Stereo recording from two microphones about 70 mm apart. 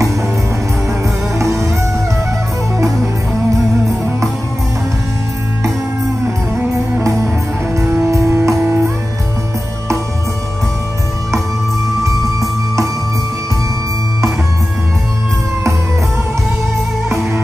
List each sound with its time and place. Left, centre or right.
1.4 s music: right
7.0 s music: right
12.0 s music: right